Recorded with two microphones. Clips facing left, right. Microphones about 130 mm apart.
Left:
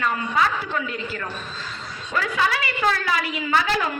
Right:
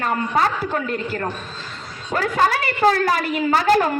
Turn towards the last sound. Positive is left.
turn(degrees=-40)  # may be behind; listen again after turning